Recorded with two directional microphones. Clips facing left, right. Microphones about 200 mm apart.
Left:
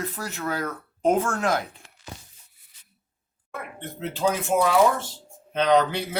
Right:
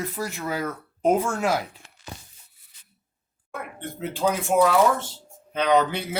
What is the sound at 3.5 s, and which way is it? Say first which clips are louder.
Speech: right 1 dB; centre (ahead or behind).